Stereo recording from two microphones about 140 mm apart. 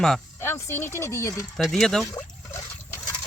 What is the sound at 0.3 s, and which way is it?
Speech, 20° left (ahead or behind).